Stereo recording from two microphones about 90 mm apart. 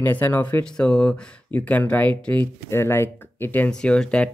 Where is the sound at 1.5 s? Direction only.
20° left (ahead or behind).